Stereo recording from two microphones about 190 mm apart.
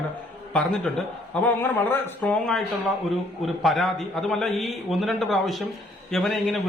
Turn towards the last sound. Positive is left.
turn(degrees=0)  # may be behind; listen again after turning